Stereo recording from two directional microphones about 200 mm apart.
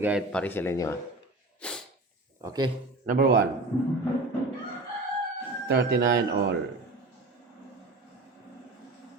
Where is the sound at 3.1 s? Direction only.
50° right (ahead or behind).